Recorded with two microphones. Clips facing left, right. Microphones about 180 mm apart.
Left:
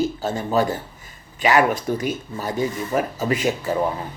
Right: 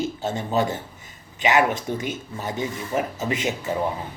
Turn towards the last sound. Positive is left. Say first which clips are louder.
# left 4 dB
turn(degrees=-20)  # may be behind; listen again after turning